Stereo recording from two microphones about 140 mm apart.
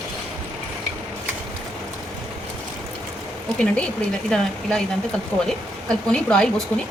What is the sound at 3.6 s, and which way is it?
Speech, 5° left (ahead or behind).